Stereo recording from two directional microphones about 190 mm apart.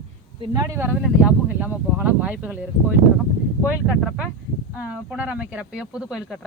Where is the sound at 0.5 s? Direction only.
20° right (ahead or behind).